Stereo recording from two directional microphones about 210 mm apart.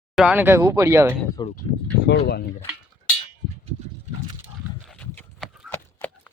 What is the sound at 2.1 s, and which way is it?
Speech, 50° left (ahead or behind).